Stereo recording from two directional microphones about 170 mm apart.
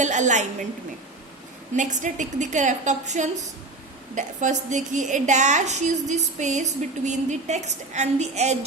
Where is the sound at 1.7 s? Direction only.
45° right (ahead or behind).